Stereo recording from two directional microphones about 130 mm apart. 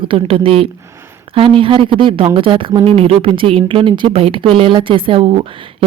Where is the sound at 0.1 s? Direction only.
45° right (ahead or behind).